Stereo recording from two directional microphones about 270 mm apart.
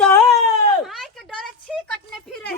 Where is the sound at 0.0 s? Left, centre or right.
Centre.